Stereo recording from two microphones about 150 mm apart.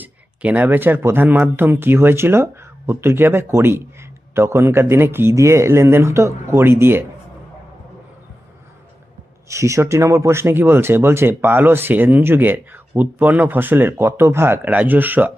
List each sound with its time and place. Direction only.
0.0 s speech: 10° right (ahead or behind)
9.5 s speech: 20° right (ahead or behind)